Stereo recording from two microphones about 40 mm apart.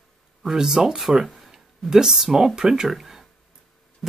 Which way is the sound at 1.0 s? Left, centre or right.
Centre.